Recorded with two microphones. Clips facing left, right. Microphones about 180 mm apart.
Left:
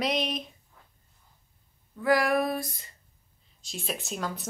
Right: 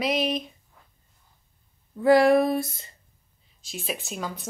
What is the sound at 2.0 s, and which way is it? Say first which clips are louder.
Female singing: right 7 dB; 25° right (ahead or behind).